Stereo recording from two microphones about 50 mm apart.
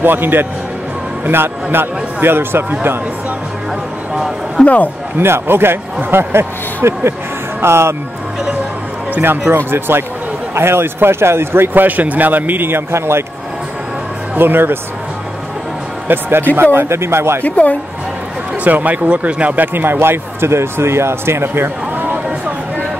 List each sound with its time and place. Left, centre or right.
0.0 s speech: right
4.6 s a man's voice: centre
5.2 s speech: right
6.3 s speech: right
9.1 s speech: right
14.3 s speech: right
16.1 s speech: right
17.4 s a woman's voice: left
18.6 s speech: right
19.0 s speech: right